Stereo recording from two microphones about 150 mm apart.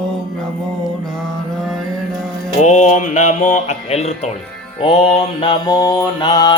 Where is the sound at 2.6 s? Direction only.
50° left (ahead or behind).